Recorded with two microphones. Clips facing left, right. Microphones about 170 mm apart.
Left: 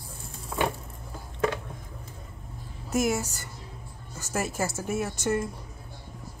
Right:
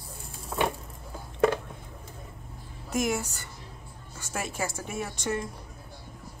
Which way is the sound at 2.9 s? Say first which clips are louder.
Left 2 dB; 5° left (ahead or behind).